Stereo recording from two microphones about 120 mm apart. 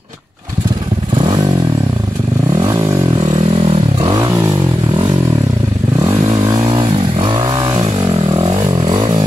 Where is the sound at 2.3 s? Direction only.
30° right (ahead or behind).